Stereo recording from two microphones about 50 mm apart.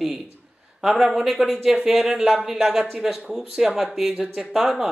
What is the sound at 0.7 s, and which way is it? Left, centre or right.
A woman's voice, centre.